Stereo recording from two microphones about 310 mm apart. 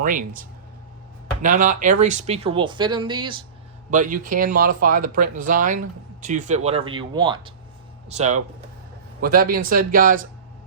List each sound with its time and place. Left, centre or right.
0.0 s speech: right